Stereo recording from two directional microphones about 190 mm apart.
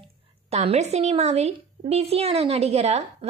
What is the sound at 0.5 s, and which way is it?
A woman's voice, 35° right (ahead or behind).